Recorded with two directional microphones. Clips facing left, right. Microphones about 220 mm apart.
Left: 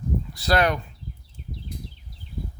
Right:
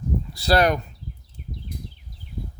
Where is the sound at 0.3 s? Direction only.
35° right (ahead or behind).